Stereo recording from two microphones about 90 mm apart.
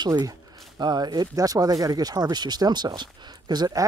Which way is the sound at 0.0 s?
55° right (ahead or behind).